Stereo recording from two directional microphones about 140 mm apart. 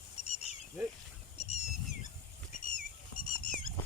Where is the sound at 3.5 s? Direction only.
75° left (ahead or behind).